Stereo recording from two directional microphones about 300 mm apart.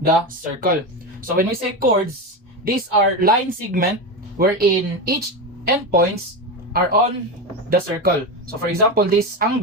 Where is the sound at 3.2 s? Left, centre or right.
Right.